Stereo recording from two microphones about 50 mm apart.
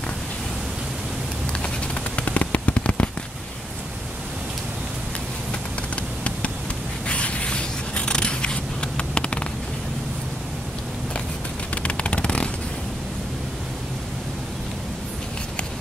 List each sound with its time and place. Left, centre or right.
2.1 s a sound: left
7.1 s scissors: left
11.7 s vehicle: left